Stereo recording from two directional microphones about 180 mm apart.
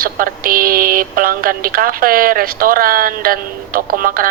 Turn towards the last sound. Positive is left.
turn(degrees=-50)  # may be behind; listen again after turning